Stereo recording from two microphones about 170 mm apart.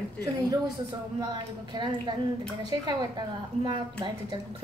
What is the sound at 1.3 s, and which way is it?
A woman's voice, 25° right (ahead or behind).